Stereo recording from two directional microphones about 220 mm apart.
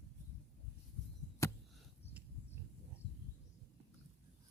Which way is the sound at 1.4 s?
15° left (ahead or behind).